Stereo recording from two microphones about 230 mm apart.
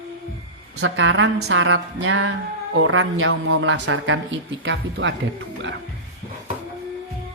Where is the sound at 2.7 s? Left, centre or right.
Right.